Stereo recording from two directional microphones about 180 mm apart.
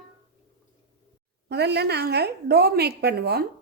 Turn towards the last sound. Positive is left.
turn(degrees=-65)  # may be behind; listen again after turning